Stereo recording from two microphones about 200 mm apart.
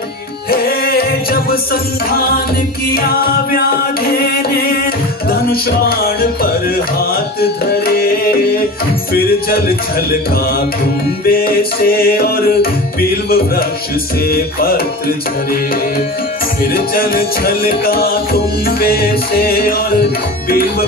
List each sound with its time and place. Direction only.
0.5 s music: 50° left (ahead or behind)
11.2 s music: 50° left (ahead or behind)
14.2 s music: 50° left (ahead or behind)
16.7 s music: 50° left (ahead or behind)